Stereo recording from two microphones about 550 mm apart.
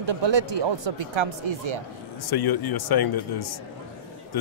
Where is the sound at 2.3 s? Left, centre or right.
Left.